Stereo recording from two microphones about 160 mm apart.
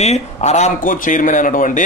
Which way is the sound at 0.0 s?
45° left (ahead or behind).